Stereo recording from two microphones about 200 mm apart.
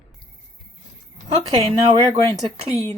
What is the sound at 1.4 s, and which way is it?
Speech, 30° right (ahead or behind).